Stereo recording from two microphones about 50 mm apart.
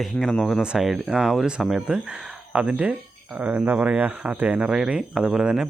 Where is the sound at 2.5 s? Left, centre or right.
Right.